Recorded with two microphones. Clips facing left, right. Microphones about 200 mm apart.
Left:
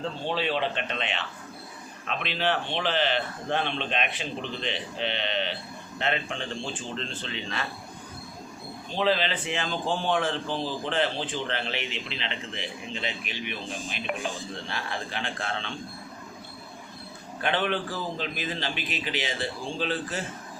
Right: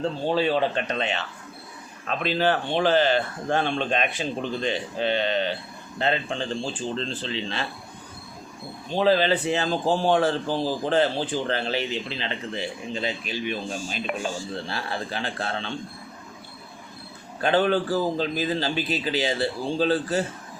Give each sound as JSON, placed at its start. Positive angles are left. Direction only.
{"t": 0.0, "sound": "a man's voice", "side_deg": -40}
{"t": 8.9, "sound": "a man's voice", "side_deg": -40}
{"t": 17.4, "sound": "a man's voice", "side_deg": -35}